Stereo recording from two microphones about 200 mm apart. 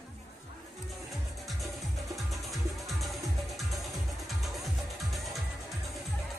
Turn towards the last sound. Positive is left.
turn(degrees=0)  # may be behind; listen again after turning